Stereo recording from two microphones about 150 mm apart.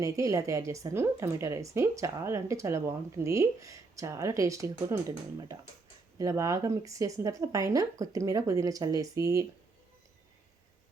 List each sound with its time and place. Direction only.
0.0 s a woman's voice: 20° right (ahead or behind)